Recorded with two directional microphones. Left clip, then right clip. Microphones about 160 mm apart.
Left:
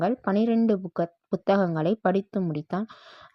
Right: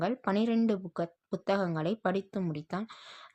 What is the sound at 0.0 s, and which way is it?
Speech, 35° left (ahead or behind).